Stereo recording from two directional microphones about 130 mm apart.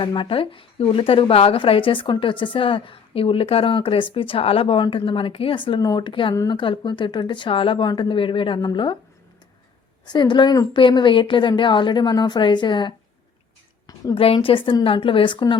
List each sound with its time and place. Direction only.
0.0 s speech: 40° left (ahead or behind)
6.3 s speech: 25° left (ahead or behind)
6.6 s a woman's voice: 40° left (ahead or behind)
10.1 s a woman's voice: 35° left (ahead or behind)
13.8 s a sound: 30° left (ahead or behind)
14.2 s a woman's voice: 45° left (ahead or behind)